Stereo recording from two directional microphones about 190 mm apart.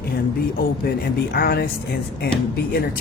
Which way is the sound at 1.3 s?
55° left (ahead or behind).